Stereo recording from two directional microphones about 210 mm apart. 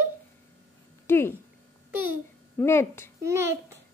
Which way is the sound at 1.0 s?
10° left (ahead or behind).